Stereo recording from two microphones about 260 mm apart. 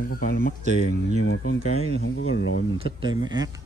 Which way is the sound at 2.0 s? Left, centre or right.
Left.